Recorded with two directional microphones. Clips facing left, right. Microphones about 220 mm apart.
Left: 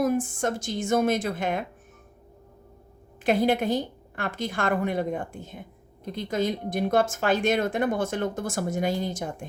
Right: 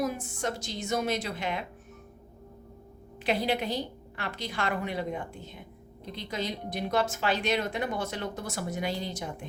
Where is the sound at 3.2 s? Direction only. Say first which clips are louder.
Left 6 dB; 50° left (ahead or behind).